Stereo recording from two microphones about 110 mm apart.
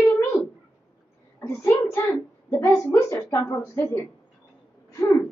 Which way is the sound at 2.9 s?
25° left (ahead or behind).